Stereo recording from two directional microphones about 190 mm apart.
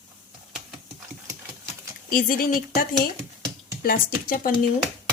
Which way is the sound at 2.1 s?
50° left (ahead or behind).